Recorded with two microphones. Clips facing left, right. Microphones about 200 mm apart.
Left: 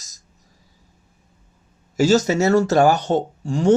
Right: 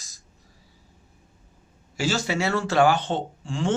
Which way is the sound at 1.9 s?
40° left (ahead or behind).